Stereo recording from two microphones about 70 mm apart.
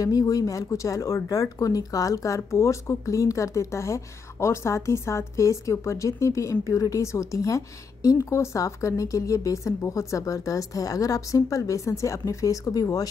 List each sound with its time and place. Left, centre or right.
0.0 s speech: left